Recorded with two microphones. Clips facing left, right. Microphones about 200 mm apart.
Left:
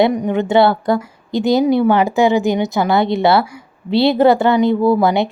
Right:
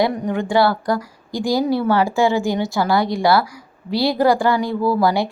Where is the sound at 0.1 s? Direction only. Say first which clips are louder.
Left 4 dB; 15° left (ahead or behind).